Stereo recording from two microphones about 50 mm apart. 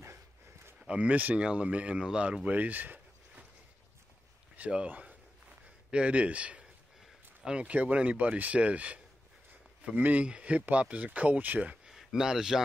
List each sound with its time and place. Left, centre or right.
0.7 s speech: right
4.8 s speech: right
5.9 s speech: right
11.8 s a sound: centre